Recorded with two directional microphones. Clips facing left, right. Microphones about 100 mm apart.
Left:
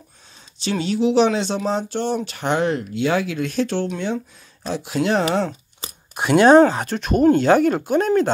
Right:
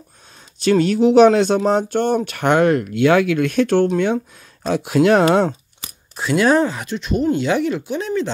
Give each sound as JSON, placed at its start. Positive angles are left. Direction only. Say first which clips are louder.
{"t": 0.7, "sound": "speech", "louder": "right 6 dB", "side_deg": -50}
{"t": 6.3, "sound": "speech", "louder": "left 4 dB", "side_deg": 25}
{"t": 7.0, "sound": "speech", "louder": "left 3 dB", "side_deg": 50}